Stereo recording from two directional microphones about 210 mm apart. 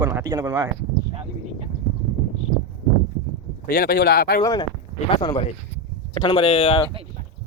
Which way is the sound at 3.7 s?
50° left (ahead or behind).